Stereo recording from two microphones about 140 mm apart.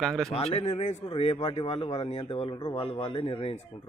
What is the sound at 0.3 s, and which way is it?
Speech, 45° left (ahead or behind).